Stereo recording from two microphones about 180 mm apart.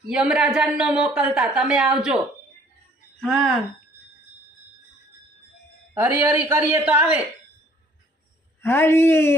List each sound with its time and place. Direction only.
0.1 s a woman's voice: 5° right (ahead or behind)
5.9 s a woman's voice: 15° right (ahead or behind)
8.6 s a man's voice: 15° left (ahead or behind)